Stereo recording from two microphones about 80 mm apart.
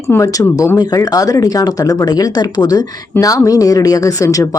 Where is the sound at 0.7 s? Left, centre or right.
Left.